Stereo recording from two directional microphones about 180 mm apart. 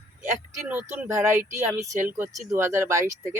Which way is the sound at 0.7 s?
10° right (ahead or behind).